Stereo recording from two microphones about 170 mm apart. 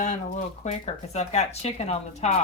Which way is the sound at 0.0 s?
45° left (ahead or behind).